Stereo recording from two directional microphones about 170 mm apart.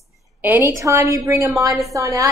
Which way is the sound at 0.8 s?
20° right (ahead or behind).